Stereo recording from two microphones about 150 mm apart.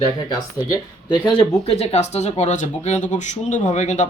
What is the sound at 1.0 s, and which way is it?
Speech, 30° left (ahead or behind).